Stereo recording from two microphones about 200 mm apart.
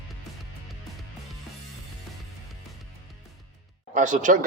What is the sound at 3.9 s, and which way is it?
Speech, 40° right (ahead or behind).